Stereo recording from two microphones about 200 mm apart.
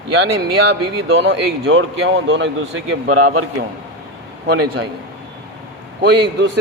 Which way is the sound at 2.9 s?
90° right.